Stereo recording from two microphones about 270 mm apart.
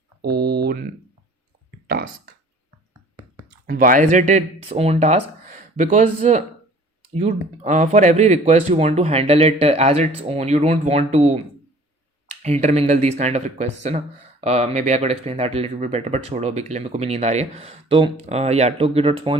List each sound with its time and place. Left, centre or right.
0.2 s a sound: right
1.9 s speech: right
3.7 s speech: right
12.4 s speech: right